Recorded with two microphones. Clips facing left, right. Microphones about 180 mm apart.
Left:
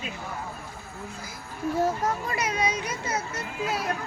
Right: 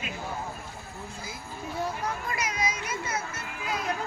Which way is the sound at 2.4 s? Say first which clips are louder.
Left 4 dB; 30° left (ahead or behind).